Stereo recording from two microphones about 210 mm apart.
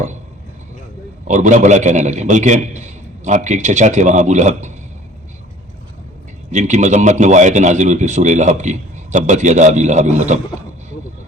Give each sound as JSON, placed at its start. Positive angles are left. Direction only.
{"t": 1.3, "sound": "a man's voice", "side_deg": -35}
{"t": 6.5, "sound": "a man's voice", "side_deg": -35}